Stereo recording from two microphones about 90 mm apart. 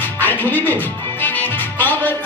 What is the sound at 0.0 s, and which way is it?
Music, 20° left (ahead or behind).